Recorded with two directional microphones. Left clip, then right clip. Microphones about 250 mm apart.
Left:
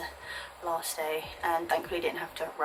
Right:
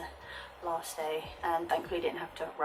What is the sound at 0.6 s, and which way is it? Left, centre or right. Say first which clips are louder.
Speech: left 3 dB; centre.